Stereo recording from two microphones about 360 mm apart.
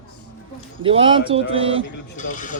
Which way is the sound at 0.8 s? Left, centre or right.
Centre.